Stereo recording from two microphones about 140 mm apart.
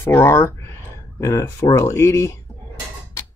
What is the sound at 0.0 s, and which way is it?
Speech, 15° left (ahead or behind).